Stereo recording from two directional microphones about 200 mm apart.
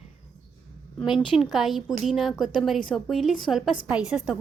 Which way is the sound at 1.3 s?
Centre (ahead or behind).